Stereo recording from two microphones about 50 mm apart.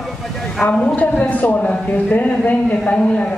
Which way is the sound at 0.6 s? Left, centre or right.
Left.